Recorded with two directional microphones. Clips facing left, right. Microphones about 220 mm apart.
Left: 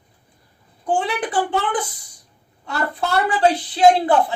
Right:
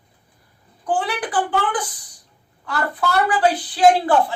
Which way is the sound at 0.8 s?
25° left (ahead or behind).